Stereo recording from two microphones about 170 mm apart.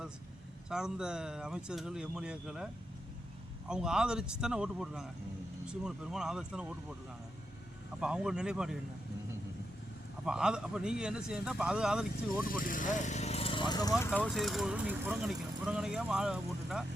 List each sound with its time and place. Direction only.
0.7 s speech: 5° right (ahead or behind)
3.7 s speech: 5° right (ahead or behind)
8.0 s speech: 5° right (ahead or behind)
10.2 s speech: 5° right (ahead or behind)
12.6 s speech: 50° left (ahead or behind); by 13.9 s 25° left (ahead or behind)
14.0 s speech: 10° left (ahead or behind)